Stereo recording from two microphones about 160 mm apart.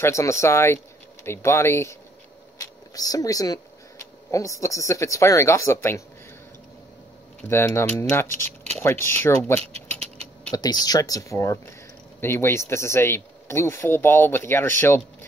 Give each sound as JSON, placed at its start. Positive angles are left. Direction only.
{"t": 0.0, "sound": "speech", "side_deg": 20}
{"t": 7.4, "sound": "speech", "side_deg": 15}
{"t": 10.5, "sound": "speech", "side_deg": 25}